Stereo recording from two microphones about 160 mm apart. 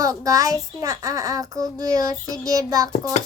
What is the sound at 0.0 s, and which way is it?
Child singing, 20° right (ahead or behind).